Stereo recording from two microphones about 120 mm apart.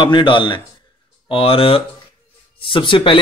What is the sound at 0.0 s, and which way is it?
Speech, 40° left (ahead or behind).